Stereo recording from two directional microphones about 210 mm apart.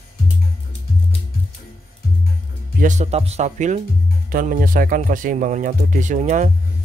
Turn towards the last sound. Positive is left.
turn(degrees=-35)  # may be behind; listen again after turning